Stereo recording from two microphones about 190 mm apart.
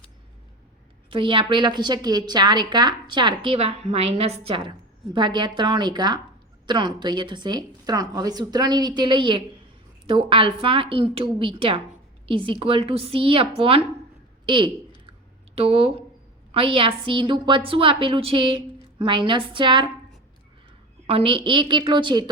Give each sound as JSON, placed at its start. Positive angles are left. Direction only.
{"t": 1.1, "sound": "a woman's voice", "side_deg": -25}
{"t": 21.1, "sound": "a woman's voice", "side_deg": -30}